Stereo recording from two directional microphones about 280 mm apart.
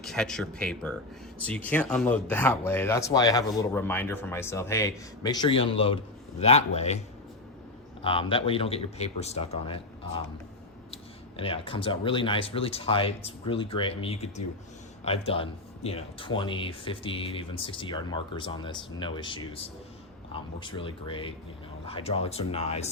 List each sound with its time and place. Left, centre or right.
0.0 s speech: centre; by 7.0 s left
8.0 s speech: centre